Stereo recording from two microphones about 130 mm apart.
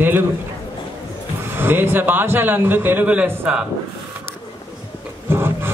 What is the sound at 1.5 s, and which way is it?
A man's voice, 15° right (ahead or behind).